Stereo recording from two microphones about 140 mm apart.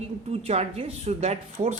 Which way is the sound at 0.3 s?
50° right (ahead or behind).